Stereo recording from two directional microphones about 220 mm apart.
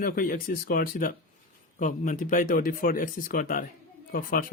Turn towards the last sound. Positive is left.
turn(degrees=40)  # may be behind; listen again after turning